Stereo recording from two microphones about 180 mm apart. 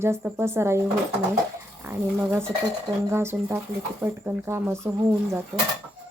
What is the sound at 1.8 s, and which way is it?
Speech, 10° right (ahead or behind).